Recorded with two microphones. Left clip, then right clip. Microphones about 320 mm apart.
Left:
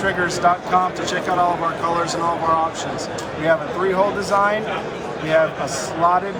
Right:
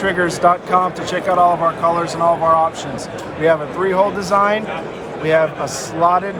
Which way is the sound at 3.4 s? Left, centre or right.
Right.